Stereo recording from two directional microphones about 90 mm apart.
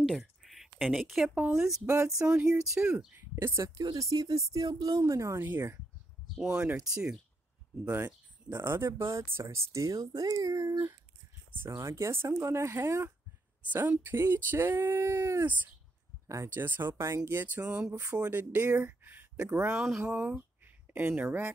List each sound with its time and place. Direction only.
0.0 s a sound: centre (ahead or behind)
1.5 s speech: 5° right (ahead or behind)
3.2 s speech: 30° right (ahead or behind)
6.3 s speech: 5° right (ahead or behind)
7.9 s speech: 25° right (ahead or behind)
13.7 s speech: 20° right (ahead or behind)
18.7 s a sound: 20° right (ahead or behind)
19.4 s speech: 25° right (ahead or behind)
19.7 s speech: 5° right (ahead or behind)
20.0 s speech: 25° right (ahead or behind)